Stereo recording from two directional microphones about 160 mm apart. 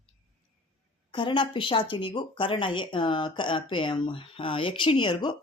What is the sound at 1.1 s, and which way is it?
Speech, 30° left (ahead or behind).